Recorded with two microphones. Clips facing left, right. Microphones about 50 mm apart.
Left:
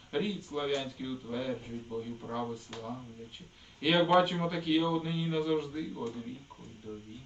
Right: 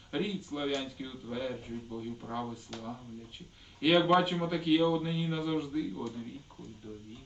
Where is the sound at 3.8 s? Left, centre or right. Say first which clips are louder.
Even; centre.